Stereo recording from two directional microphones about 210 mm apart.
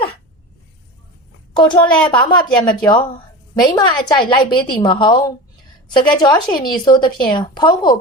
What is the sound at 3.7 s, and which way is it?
A woman's voice, 20° left (ahead or behind).